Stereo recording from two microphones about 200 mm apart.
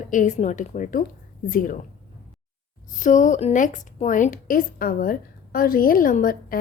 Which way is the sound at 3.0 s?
40° left (ahead or behind).